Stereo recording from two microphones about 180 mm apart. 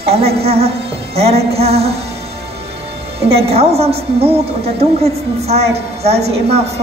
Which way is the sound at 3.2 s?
35° right (ahead or behind).